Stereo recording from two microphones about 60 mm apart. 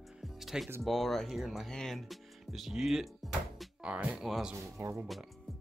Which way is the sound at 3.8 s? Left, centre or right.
Centre.